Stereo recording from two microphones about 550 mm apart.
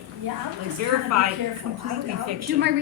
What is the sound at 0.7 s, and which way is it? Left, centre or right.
Speech, right.